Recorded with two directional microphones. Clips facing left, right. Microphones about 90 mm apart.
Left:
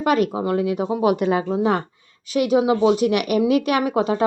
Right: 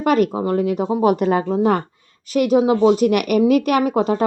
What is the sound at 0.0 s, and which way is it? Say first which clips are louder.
Speech: right 2 dB; 45° right (ahead or behind).